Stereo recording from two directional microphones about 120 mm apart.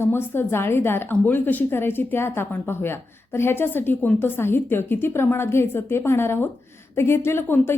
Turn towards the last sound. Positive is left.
turn(degrees=20)  # may be behind; listen again after turning